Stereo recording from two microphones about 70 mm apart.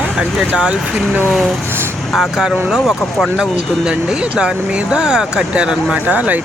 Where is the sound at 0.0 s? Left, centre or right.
Centre.